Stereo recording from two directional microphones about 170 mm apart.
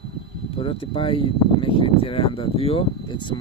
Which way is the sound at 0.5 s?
35° left (ahead or behind).